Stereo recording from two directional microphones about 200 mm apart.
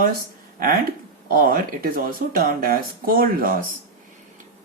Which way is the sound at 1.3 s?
45° right (ahead or behind).